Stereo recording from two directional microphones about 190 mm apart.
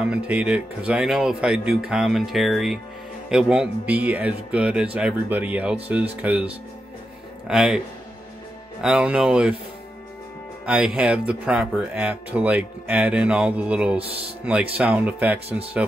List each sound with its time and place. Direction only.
0.0 s speech: 5° right (ahead or behind)
7.4 s speech: 5° right (ahead or behind)
8.8 s speech: 5° right (ahead or behind)
10.6 s speech: 5° right (ahead or behind)
13.9 s speech: 30° right (ahead or behind)
14.8 s speech: 10° right (ahead or behind)